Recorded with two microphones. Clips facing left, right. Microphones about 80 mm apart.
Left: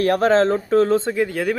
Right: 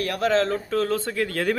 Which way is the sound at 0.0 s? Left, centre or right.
Left.